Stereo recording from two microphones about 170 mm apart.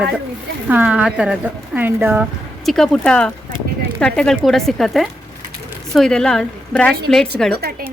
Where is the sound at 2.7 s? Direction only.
5° left (ahead or behind).